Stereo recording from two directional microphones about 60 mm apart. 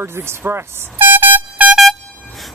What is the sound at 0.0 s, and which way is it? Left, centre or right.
Speech, right.